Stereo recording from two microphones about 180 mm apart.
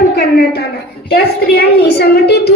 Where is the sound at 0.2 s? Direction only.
60° left (ahead or behind).